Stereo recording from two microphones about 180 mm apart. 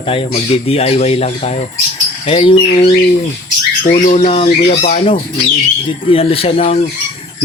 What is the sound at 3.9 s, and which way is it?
Speech, 40° left (ahead or behind).